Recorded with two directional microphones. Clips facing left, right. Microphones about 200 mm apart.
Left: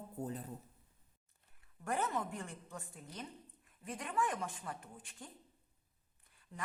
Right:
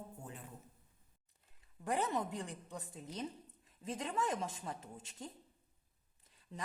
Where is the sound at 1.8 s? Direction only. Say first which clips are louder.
Right 1 dB; 15° right (ahead or behind).